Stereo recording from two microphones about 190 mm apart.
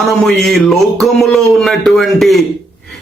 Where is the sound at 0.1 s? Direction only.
Centre (ahead or behind).